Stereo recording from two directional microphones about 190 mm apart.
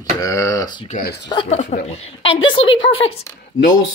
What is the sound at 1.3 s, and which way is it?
A woman's voice, 25° left (ahead or behind).